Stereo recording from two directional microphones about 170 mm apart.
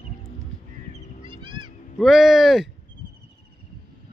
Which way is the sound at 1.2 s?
30° right (ahead or behind).